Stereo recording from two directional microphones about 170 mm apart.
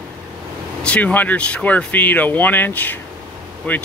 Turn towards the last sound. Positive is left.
turn(degrees=10)  # may be behind; listen again after turning